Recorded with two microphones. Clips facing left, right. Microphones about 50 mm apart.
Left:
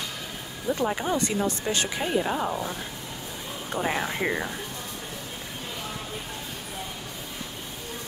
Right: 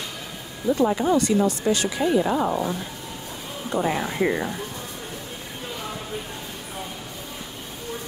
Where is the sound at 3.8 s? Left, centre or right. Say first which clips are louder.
Right 1 dB; centre.